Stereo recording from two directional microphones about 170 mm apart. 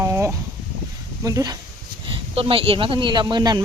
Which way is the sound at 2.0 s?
30° right (ahead or behind).